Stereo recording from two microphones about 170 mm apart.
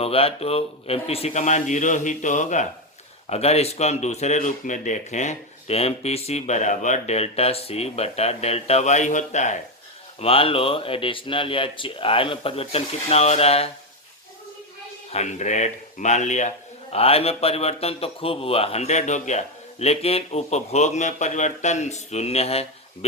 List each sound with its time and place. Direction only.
0.0 s a man's voice: 35° left (ahead or behind)
10.2 s speech: 35° left (ahead or behind)
15.1 s a man's voice: 45° left (ahead or behind)